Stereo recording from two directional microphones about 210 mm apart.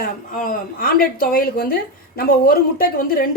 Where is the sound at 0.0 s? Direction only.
40° left (ahead or behind).